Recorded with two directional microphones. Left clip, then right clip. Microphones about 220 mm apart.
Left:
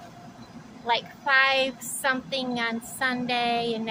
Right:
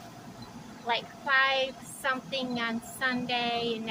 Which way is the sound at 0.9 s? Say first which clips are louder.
Left 4 dB; 35° left (ahead or behind).